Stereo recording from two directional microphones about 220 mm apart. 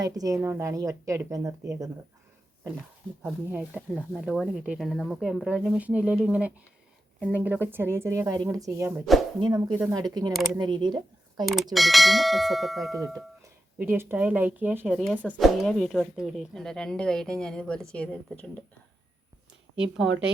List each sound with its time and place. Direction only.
0.0 s a woman's voice: 15° right (ahead or behind)
3.2 s a woman's voice: 5° right (ahead or behind)
11.4 s a woman's voice: centre (ahead or behind)
19.7 s speech: 5° right (ahead or behind)